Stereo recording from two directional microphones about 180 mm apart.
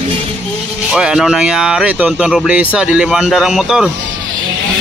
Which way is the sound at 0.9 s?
5° right (ahead or behind).